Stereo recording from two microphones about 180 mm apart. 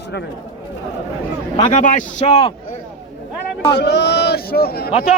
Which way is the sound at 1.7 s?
45° left (ahead or behind).